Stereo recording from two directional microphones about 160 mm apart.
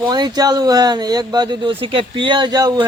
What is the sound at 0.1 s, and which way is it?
Speech, 25° right (ahead or behind).